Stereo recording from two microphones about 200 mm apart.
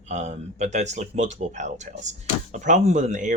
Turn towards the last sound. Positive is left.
turn(degrees=-40)  # may be behind; listen again after turning